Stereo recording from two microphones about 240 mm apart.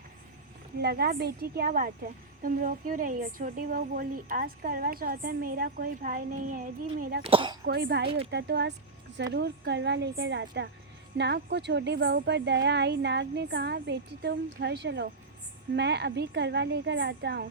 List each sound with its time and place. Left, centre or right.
0.8 s a woman's voice: right
7.3 s speech: right
7.6 s a woman's voice: right